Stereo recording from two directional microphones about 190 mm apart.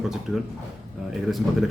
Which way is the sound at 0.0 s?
5° right (ahead or behind).